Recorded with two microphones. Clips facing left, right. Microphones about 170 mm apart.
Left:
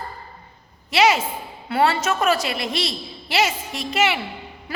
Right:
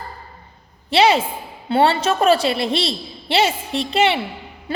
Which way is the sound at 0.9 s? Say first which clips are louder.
Right 3 dB; 30° right (ahead or behind).